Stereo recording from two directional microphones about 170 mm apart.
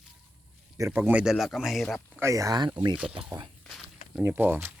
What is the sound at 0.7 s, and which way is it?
Speech, 15° right (ahead or behind).